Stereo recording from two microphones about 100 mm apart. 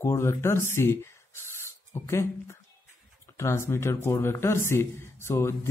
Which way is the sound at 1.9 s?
25° left (ahead or behind).